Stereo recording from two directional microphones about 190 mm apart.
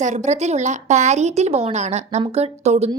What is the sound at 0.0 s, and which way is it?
A woman's voice, 40° right (ahead or behind).